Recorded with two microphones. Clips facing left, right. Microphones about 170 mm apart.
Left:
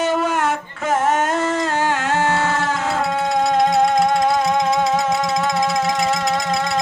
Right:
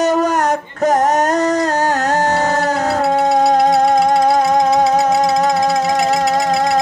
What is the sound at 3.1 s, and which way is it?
Music, 40° right (ahead or behind).